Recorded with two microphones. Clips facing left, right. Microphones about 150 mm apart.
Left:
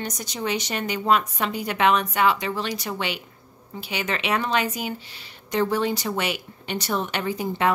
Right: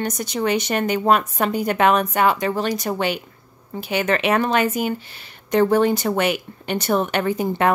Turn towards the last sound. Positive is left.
turn(degrees=-50)  # may be behind; listen again after turning